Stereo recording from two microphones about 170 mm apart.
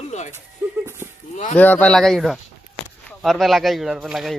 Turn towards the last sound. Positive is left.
turn(degrees=0)  # may be behind; listen again after turning